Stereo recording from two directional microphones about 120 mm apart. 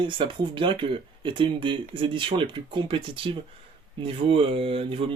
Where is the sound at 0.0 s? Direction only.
45° right (ahead or behind).